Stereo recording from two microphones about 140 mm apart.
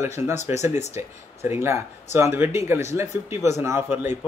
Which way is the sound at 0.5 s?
55° left (ahead or behind).